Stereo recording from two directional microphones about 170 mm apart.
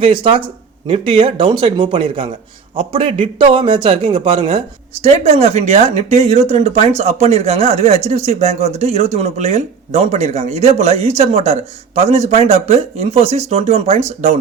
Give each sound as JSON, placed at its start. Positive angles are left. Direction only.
{"t": 0.0, "sound": "speech", "side_deg": -30}